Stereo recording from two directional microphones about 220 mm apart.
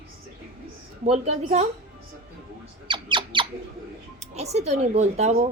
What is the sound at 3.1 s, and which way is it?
Music, 20° right (ahead or behind).